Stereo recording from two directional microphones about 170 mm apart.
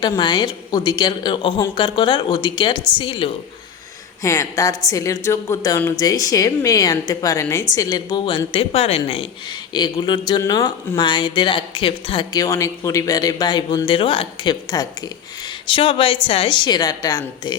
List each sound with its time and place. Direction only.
0.0 s speech: 25° left (ahead or behind)
4.2 s speech: 15° left (ahead or behind)